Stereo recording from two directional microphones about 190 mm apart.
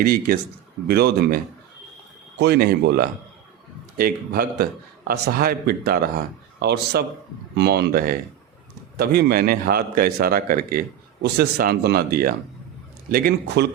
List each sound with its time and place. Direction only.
0.0 s a man's voice: 50° right (ahead or behind)
2.4 s a man's voice: 55° right (ahead or behind)